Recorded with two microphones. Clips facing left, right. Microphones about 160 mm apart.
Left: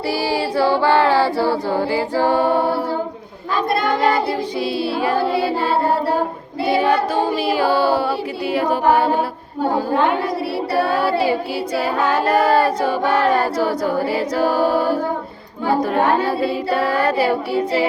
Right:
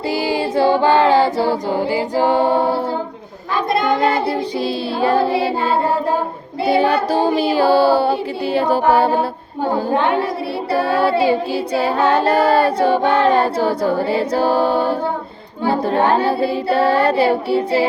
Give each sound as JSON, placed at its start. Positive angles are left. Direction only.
{"t": 0.1, "sound": "a capella", "side_deg": -20}
{"t": 3.7, "sound": "child singing", "side_deg": -25}
{"t": 4.9, "sound": "music", "side_deg": -30}
{"t": 6.7, "sound": "music", "side_deg": -30}
{"t": 10.7, "sound": "music", "side_deg": -25}